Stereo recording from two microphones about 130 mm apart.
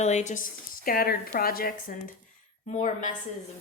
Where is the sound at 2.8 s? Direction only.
70° left (ahead or behind).